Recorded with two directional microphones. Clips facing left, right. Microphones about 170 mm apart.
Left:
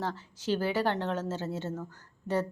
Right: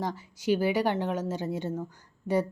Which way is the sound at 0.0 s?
10° right (ahead or behind).